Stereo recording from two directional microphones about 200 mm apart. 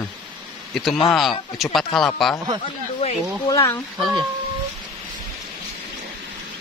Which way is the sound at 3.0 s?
30° left (ahead or behind).